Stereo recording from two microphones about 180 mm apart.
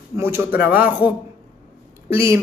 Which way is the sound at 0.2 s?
10° right (ahead or behind).